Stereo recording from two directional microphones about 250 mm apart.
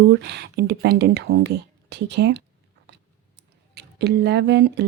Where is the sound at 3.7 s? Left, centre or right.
Right.